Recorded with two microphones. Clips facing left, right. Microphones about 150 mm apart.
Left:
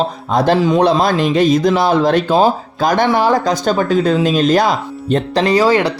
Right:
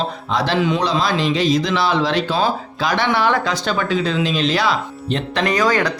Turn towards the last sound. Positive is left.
turn(degrees=30)  # may be behind; listen again after turning